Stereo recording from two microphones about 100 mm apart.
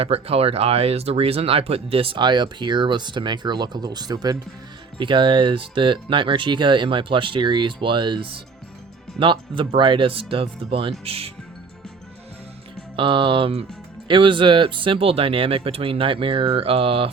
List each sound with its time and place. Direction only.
0.0 s speech: 75° right (ahead or behind); by 4.4 s 40° right (ahead or behind)
4.9 s speech: 55° right (ahead or behind)
11.0 s speech: 75° right (ahead or behind)
13.0 s speech: 60° right (ahead or behind)
14.1 s speech: 60° right (ahead or behind)